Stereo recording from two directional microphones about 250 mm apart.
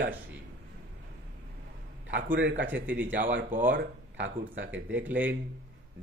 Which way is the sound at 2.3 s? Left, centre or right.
Right.